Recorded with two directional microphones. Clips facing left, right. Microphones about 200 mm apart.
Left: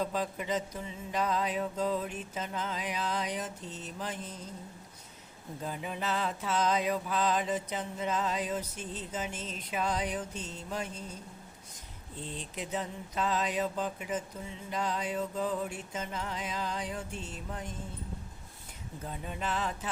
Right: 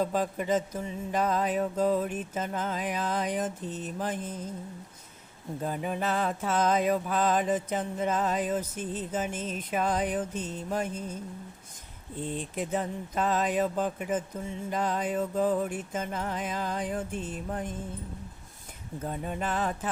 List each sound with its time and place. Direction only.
0.0 s mantra: 45° right (ahead or behind)
5.6 s mantra: 50° right (ahead or behind)
12.2 s mantra: 50° right (ahead or behind)
19.0 s mantra: 50° right (ahead or behind)